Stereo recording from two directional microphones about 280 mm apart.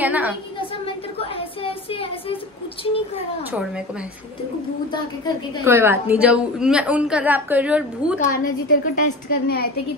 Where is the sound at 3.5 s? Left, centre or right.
Centre.